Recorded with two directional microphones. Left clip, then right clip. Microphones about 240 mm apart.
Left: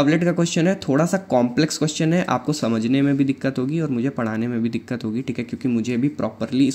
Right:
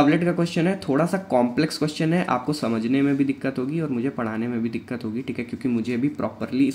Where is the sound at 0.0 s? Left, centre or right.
Left.